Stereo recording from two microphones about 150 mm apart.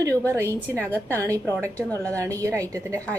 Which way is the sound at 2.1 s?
20° right (ahead or behind).